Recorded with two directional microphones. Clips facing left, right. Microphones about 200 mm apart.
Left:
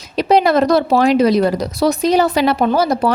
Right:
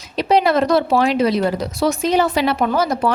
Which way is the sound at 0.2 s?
45° left (ahead or behind).